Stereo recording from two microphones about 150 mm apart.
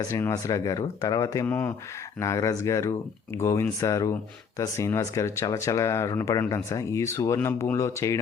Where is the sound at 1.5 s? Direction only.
15° left (ahead or behind).